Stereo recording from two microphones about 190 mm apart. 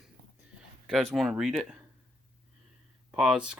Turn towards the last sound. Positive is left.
turn(degrees=0)  # may be behind; listen again after turning